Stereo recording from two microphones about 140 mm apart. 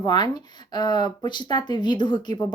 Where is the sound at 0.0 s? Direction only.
30° left (ahead or behind).